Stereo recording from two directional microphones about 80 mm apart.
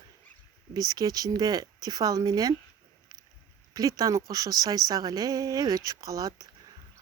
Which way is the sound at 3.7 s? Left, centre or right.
Right.